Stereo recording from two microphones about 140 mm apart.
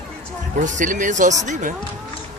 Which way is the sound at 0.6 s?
65° right (ahead or behind).